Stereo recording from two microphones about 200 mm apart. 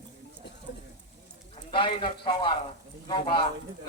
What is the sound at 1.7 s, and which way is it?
A man's voice, 25° left (ahead or behind).